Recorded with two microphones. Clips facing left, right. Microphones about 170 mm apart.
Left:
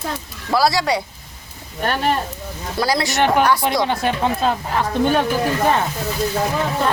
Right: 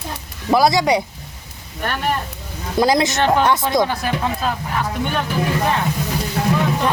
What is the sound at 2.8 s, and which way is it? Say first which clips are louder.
Speech: right 4 dB; 20° right (ahead or behind).